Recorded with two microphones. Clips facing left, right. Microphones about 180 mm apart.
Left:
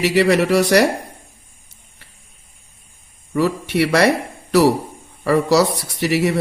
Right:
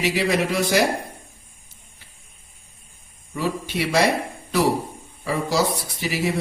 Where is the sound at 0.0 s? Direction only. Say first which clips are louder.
Left 6 dB; 70° left (ahead or behind).